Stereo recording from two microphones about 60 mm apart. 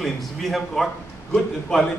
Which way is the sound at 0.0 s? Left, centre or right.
Centre.